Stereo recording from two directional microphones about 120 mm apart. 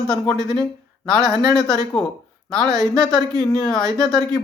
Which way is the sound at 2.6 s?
30° right (ahead or behind).